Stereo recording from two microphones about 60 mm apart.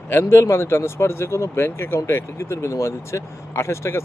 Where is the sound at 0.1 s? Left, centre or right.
Left.